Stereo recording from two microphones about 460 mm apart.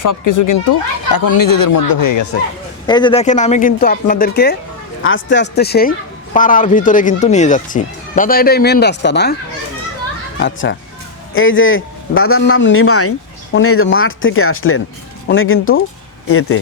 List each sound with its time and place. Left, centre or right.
0.0 s speech: left
2.8 s a man's voice: centre
10.4 s a man's voice: left